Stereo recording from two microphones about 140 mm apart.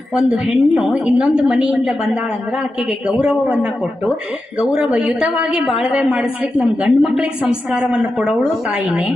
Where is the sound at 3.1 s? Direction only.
5° right (ahead or behind).